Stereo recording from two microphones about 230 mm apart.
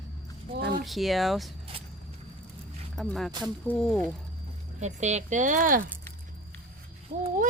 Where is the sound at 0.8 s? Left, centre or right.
Centre.